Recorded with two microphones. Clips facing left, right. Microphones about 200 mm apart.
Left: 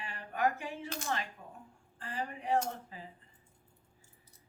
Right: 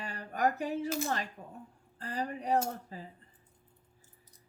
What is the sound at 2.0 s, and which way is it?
Speech, 40° right (ahead or behind).